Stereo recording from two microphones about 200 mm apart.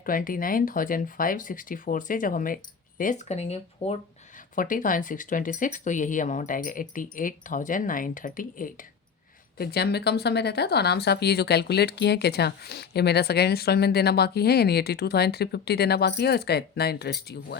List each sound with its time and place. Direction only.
0.0 s speech: 45° left (ahead or behind)
4.5 s speech: 40° left (ahead or behind)